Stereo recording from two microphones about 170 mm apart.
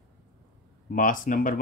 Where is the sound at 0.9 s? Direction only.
50° left (ahead or behind).